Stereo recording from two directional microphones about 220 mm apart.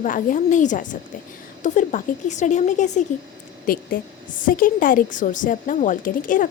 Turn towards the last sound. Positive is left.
turn(degrees=35)  # may be behind; listen again after turning